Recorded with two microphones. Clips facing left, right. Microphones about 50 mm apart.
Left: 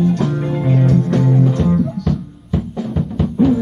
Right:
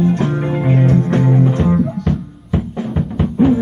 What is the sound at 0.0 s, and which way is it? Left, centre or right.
Music, right.